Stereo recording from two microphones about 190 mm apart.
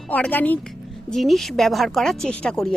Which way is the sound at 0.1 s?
10° left (ahead or behind).